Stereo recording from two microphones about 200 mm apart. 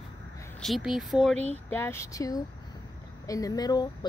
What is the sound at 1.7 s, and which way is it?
Speech, 10° left (ahead or behind).